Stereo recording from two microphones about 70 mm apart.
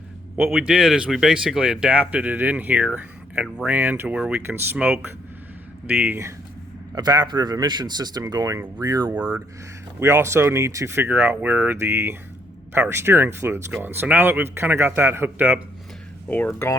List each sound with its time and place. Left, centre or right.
0.3 s speech: centre
1.9 s speech: centre
4.1 s speech: centre
4.4 s speech: right
6.9 s speech: right
8.3 s speech: right
8.8 s speech: right
9.1 s speech: right
10.0 s speech: right
10.9 s speech: right
16.3 s speech: left